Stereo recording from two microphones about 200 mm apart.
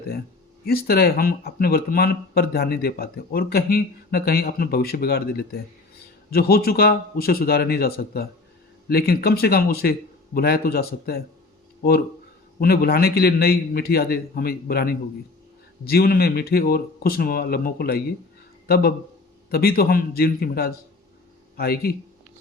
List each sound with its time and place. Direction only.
0.6 s speech: 50° left (ahead or behind)